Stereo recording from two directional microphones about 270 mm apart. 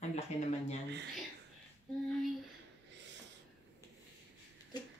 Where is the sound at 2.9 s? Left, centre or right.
Right.